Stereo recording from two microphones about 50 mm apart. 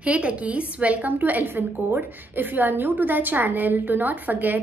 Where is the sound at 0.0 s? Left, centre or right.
Right.